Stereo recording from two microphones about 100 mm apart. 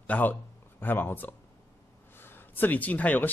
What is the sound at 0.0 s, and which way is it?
A man's voice, 15° left (ahead or behind).